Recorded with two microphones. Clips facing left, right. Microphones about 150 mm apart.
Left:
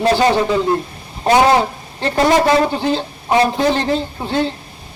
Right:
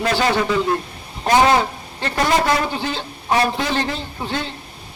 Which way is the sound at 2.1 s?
30° left (ahead or behind).